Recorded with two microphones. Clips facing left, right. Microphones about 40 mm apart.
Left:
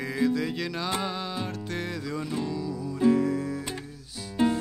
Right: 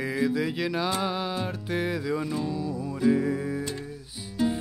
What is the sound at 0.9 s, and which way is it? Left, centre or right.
Music, centre.